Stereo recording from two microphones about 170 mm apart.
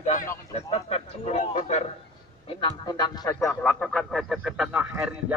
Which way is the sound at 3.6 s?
5° left (ahead or behind).